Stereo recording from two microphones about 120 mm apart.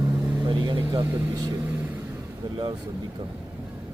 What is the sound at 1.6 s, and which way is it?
Vehicle, 15° right (ahead or behind).